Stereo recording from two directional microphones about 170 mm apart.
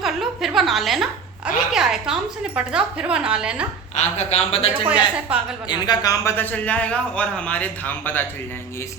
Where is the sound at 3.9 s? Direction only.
40° left (ahead or behind).